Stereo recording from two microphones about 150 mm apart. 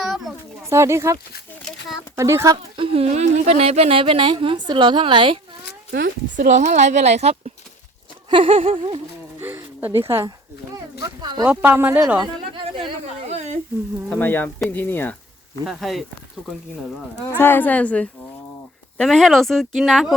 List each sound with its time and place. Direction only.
0.0 s pigeon: centre (ahead or behind)
0.7 s speech: 20° right (ahead or behind)
2.7 s speech: 40° right (ahead or behind)
5.9 s speech: 65° right (ahead or behind); by 9.0 s 40° right (ahead or behind)
9.4 s a sound: 15° right (ahead or behind)
10.1 s speech: 20° right (ahead or behind)
11.2 s a sound: 30° right (ahead or behind)
11.4 s speech: 10° right (ahead or behind)
12.2 s a sound: 35° right (ahead or behind)
13.2 s a sound: 50° right (ahead or behind)
14.1 s a woman's voice: 10° left (ahead or behind)
15.6 s speech: centre (ahead or behind)
17.2 s a woman's voice: 15° left (ahead or behind); by 20.1 s centre (ahead or behind)